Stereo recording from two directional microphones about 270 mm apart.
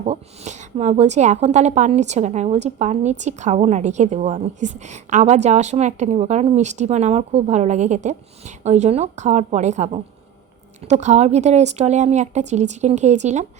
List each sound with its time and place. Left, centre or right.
0.0 s speech: right